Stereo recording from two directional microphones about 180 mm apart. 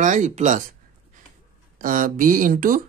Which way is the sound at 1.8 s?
50° right (ahead or behind).